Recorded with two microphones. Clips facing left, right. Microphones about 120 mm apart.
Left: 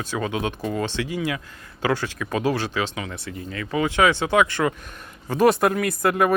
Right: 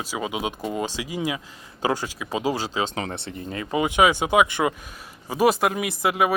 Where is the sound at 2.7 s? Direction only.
35° right (ahead or behind).